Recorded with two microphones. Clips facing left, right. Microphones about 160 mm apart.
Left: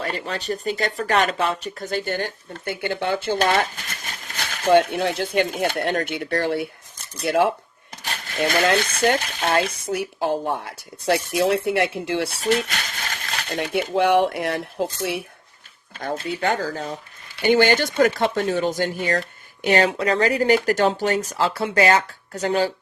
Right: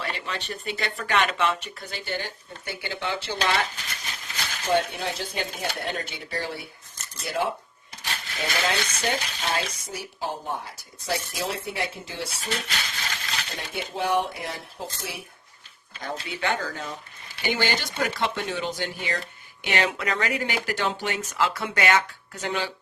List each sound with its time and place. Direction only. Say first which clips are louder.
0.0 s speech: left 5 dB; 40° left (ahead or behind); by 7.5 s 65° left (ahead or behind)
8.0 s speech: left 8 dB; 50° left (ahead or behind); by 15.2 s 65° left (ahead or behind)
15.9 s speech: left 7 dB; 50° left (ahead or behind); by 16.9 s 35° left (ahead or behind)
17.4 s speech: left 10 dB; 50° left (ahead or behind)